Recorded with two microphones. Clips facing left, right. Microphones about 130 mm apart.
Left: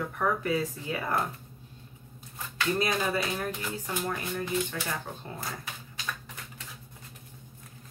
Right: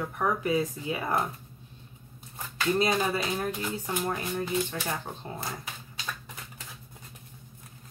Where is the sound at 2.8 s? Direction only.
25° right (ahead or behind).